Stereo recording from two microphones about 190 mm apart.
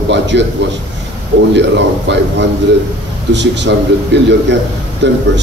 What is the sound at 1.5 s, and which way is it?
A man's voice, 65° right (ahead or behind).